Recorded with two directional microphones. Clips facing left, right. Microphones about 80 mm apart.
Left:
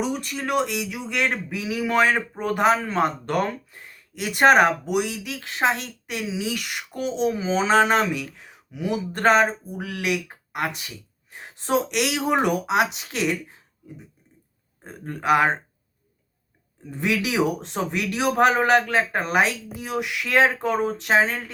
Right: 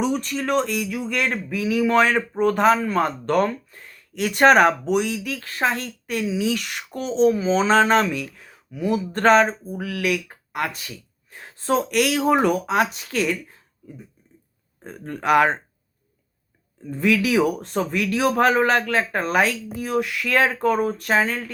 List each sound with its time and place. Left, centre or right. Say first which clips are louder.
0.3 s a man's voice: right 2 dB; centre
6.9 s speech: left 1 dB; right
7.3 s speech: right 3 dB; centre
9.7 s a man's voice: right 2 dB; left
15.0 s a man's voice: right 2 dB; left
16.9 s a man's voice: right 5 dB; left